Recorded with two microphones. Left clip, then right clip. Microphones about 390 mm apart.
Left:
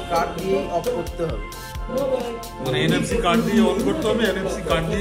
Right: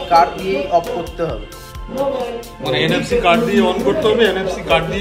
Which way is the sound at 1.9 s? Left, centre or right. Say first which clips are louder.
Right 3 dB; centre.